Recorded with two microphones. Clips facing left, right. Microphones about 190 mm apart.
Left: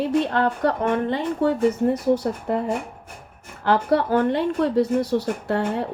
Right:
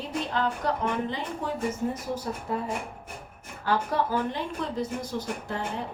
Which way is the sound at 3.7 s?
65° left (ahead or behind).